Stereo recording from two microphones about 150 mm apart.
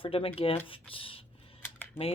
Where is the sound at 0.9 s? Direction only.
35° left (ahead or behind).